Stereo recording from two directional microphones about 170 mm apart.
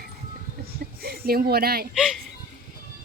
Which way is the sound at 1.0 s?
65° right (ahead or behind).